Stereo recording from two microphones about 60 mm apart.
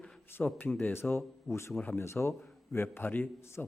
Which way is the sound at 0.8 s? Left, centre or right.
Left.